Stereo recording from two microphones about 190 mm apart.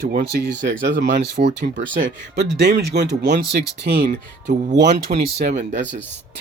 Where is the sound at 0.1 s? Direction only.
45° right (ahead or behind).